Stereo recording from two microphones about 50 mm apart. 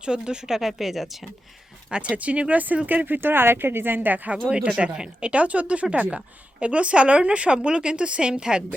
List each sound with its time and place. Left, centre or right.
0.0 s speech: centre
1.9 s a woman's voice: right
3.2 s speech: right
4.4 s a woman's voice: right